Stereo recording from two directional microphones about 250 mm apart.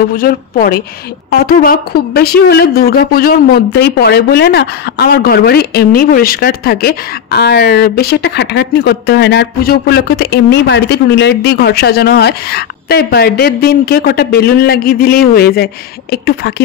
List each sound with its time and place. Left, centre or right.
0.1 s speech: left